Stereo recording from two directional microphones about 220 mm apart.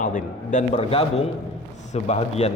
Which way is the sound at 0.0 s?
35° left (ahead or behind).